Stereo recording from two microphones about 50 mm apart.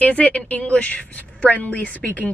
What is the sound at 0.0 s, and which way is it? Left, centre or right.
A woman's voice, left.